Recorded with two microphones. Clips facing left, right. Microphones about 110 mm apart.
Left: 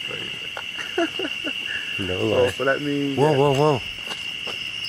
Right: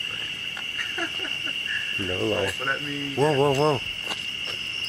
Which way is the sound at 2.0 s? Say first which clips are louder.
Left 6 dB; 15° left (ahead or behind).